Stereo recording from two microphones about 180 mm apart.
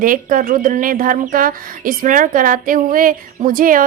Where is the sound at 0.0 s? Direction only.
50° right (ahead or behind).